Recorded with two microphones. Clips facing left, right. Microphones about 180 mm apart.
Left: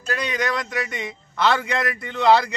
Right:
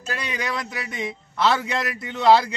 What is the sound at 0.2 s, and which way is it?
A man's voice, 5° right (ahead or behind).